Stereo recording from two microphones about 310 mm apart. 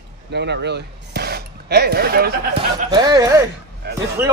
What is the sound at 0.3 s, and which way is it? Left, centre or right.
Speech, right.